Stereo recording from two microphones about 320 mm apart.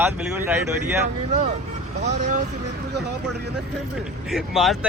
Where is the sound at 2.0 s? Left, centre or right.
Right.